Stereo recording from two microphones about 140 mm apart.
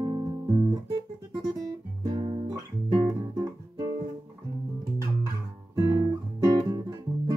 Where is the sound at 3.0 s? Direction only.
25° right (ahead or behind).